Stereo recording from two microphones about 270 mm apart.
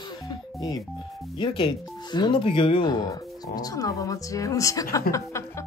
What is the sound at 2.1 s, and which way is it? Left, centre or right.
Speech, centre.